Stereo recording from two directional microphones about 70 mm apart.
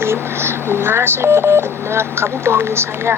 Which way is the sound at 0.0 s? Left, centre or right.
Right.